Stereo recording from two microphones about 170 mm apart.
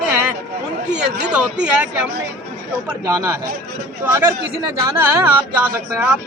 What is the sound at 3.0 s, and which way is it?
Speech, 15° right (ahead or behind).